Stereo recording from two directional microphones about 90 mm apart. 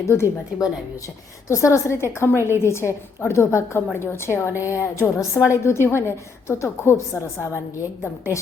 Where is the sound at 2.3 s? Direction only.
30° right (ahead or behind).